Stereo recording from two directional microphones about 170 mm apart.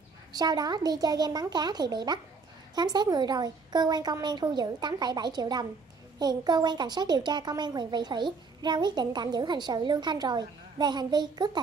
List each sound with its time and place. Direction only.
0.3 s a woman's voice: 25° right (ahead or behind)